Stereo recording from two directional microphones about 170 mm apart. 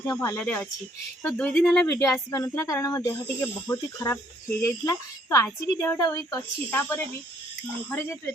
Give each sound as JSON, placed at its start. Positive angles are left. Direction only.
{"t": 0.1, "sound": "speech", "side_deg": 15}